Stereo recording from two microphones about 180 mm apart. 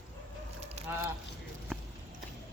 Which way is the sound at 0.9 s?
10° right (ahead or behind).